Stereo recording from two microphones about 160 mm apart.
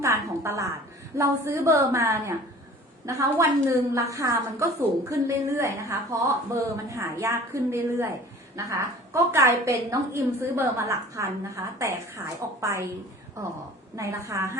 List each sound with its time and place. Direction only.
0.0 s a sound: 15° right (ahead or behind)
1.1 s a woman's voice: 20° right (ahead or behind)
13.9 s a woman's voice: 20° right (ahead or behind)